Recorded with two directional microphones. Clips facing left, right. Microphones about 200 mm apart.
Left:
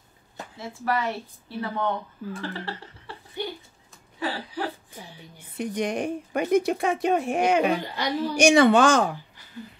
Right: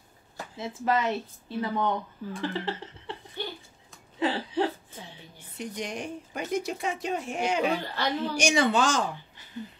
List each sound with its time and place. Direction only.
0.6 s speech: 20° right (ahead or behind)
4.2 s a sound: 25° right (ahead or behind)
5.6 s speech: 55° left (ahead or behind)
7.6 s speech: 15° left (ahead or behind)
8.4 s speech: 60° left (ahead or behind)